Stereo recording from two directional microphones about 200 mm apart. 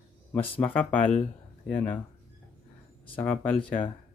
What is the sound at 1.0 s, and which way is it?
Speech, 35° left (ahead or behind).